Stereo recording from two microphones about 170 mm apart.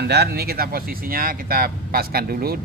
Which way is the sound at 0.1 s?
70° right (ahead or behind).